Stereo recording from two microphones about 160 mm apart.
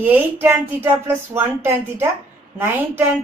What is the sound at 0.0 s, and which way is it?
Speech, 15° right (ahead or behind).